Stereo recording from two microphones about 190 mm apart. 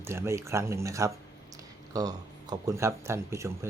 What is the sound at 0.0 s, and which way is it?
Speech, 15° right (ahead or behind).